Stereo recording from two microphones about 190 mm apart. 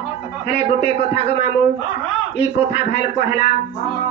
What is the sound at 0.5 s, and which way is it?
Speech, 60° left (ahead or behind).